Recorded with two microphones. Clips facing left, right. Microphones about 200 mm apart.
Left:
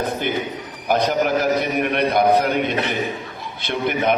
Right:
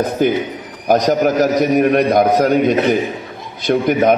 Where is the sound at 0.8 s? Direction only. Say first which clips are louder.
Right 5 dB; 40° right (ahead or behind).